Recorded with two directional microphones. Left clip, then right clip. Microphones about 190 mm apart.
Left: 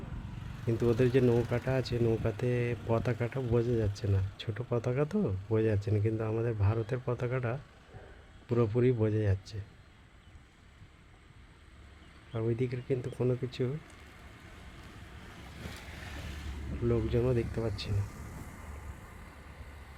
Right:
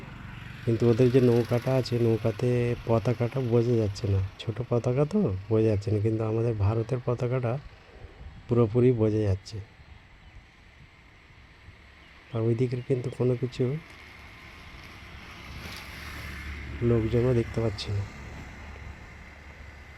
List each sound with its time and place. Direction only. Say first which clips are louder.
0.3 s a sound: right 6 dB; 30° left (ahead or behind)
0.8 s speech: right 5 dB; 15° right (ahead or behind)
12.3 s speech: right 5 dB; 15° right (ahead or behind)
15.3 s boat: right 6 dB; 60° left (ahead or behind); by 16.6 s 35° left (ahead or behind)
16.8 s speech: right 5 dB; 15° right (ahead or behind)
17.3 s speech: right 5 dB; 25° right (ahead or behind)
17.9 s a sound: right 4 dB; 30° right (ahead or behind)